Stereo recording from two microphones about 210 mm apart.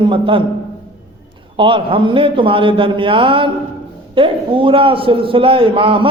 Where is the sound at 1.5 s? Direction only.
25° right (ahead or behind).